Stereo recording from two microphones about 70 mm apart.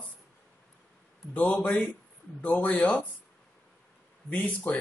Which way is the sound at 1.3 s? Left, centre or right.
Centre.